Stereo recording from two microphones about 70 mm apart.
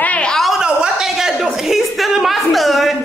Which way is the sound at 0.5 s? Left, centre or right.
Centre.